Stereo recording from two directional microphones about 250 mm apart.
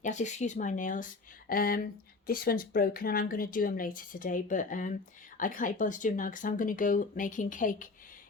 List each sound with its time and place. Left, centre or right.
0.0 s speech: left